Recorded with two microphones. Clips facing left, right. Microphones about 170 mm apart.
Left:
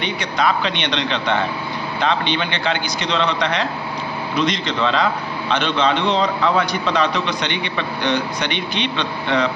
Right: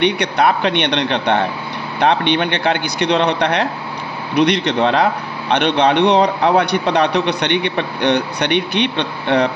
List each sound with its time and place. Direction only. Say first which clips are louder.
0.0 s a man's voice: right 6 dB; 65° right (ahead or behind)